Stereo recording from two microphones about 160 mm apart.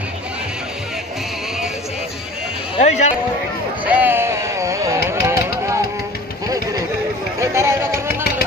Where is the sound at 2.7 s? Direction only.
40° left (ahead or behind).